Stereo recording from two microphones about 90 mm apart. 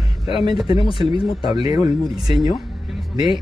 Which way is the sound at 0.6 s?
75° left (ahead or behind).